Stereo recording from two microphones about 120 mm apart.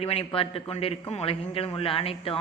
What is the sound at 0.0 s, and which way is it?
Speech, 55° left (ahead or behind).